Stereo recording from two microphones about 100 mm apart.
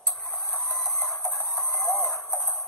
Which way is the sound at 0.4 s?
25° left (ahead or behind).